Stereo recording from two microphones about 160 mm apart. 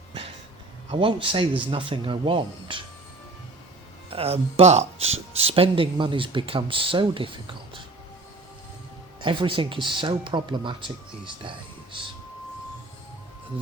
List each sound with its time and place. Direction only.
0.9 s speech: 35° right (ahead or behind)
4.1 s speech: 40° right (ahead or behind)
9.2 s speech: 30° right (ahead or behind)